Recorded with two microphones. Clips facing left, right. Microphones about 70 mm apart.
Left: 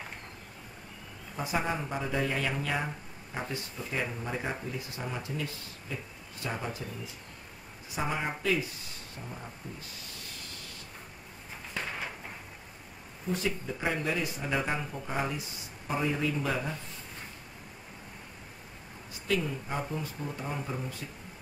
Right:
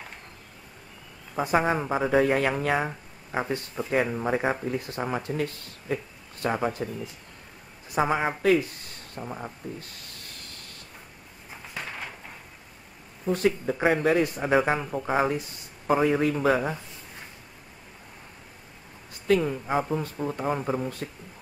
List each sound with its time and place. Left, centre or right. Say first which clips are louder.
1.3 s speech: right 8 dB; right
8.0 s speech: right 8 dB; right
8.4 s a sound: right 8 dB; right
13.3 s speech: right 8 dB; right
14.9 s speech: right 9 dB; right
15.2 s speech: right 8 dB; right
19.2 s speech: right 8 dB; right